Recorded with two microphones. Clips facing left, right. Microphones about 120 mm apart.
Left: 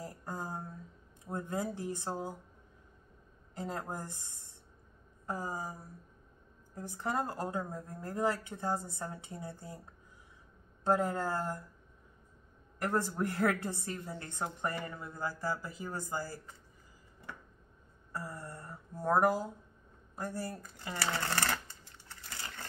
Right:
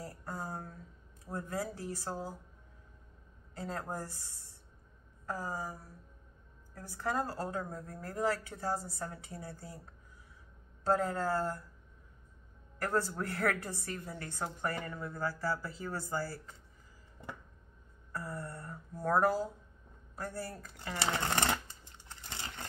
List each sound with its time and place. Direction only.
0.0 s a sound: 20° left (ahead or behind)
1.3 s a woman's voice: 20° left (ahead or behind)
3.5 s a woman's voice: 20° left (ahead or behind)
10.8 s a woman's voice: 20° left (ahead or behind)
12.7 s a woman's voice: 20° left (ahead or behind)
18.2 s a woman's voice: 15° left (ahead or behind)
21.0 s a sound: 20° right (ahead or behind)